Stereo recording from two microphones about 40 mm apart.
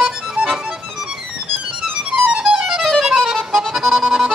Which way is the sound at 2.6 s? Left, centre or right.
Centre.